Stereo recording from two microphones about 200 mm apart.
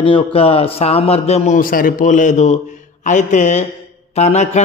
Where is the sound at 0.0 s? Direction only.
25° left (ahead or behind).